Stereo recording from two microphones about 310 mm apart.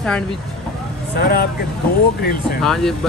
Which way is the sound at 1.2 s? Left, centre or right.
Left.